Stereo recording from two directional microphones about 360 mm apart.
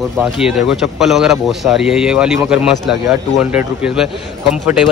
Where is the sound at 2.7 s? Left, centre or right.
Left.